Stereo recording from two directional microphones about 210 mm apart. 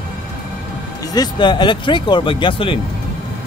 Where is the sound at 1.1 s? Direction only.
20° left (ahead or behind).